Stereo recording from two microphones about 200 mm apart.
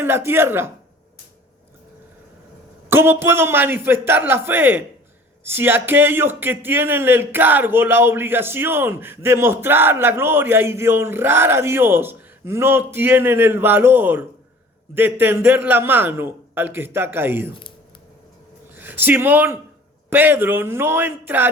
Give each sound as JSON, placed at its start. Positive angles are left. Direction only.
{"t": 0.0, "sound": "speech", "side_deg": -10}
{"t": 2.9, "sound": "speech", "side_deg": -10}
{"t": 18.7, "sound": "speech", "side_deg": -10}